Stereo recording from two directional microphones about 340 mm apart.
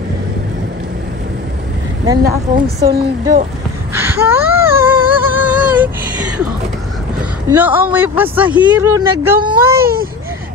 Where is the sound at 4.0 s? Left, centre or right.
Centre.